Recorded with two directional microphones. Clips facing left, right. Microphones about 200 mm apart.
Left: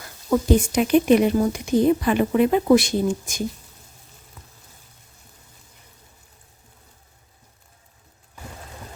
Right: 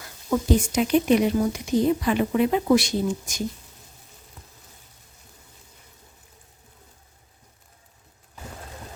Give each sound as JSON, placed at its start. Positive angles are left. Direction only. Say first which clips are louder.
{"t": 0.3, "sound": "speech", "louder": "left 3 dB", "side_deg": 55}